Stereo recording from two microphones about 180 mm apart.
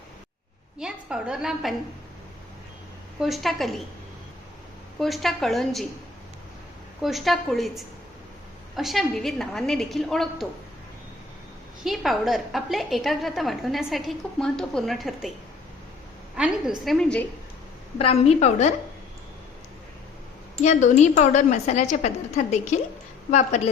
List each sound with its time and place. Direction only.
0.8 s a woman's voice: 5° right (ahead or behind)
3.2 s a woman's voice: centre (ahead or behind)
4.9 s a woman's voice: centre (ahead or behind)
7.0 s a woman's voice: centre (ahead or behind)
11.8 s a woman's voice: centre (ahead or behind)
16.3 s a woman's voice: 5° right (ahead or behind)
17.9 s a woman's voice: 35° left (ahead or behind)
20.6 s a woman's voice: 40° left (ahead or behind)